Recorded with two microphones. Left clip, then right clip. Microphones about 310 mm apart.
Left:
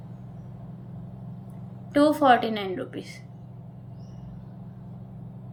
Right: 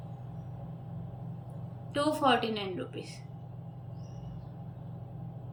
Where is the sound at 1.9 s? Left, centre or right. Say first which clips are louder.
Left 8 dB; centre.